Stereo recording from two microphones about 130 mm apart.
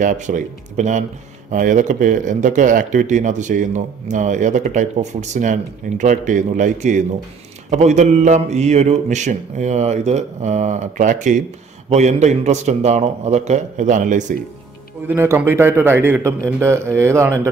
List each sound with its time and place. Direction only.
0.0 s speech: 75° right (ahead or behind)
1.5 s speech: 85° right
7.7 s a man's voice: 65° right (ahead or behind)
15.0 s a man's voice: 20° right (ahead or behind)